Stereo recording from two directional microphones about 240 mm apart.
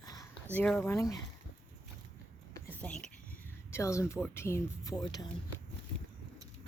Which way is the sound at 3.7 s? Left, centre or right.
Centre.